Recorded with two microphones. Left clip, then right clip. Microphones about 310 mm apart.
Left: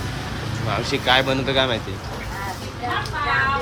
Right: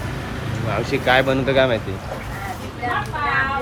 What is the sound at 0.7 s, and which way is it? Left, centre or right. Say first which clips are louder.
Speech: right 1 dB; centre.